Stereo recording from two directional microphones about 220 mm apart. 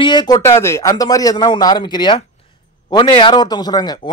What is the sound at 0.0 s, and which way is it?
Speech, 20° left (ahead or behind).